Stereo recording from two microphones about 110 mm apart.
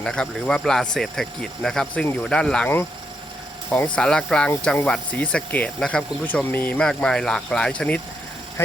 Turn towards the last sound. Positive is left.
turn(degrees=5)  # may be behind; listen again after turning